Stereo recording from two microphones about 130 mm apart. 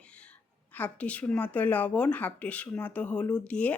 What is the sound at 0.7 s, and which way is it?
Speech, 10° left (ahead or behind).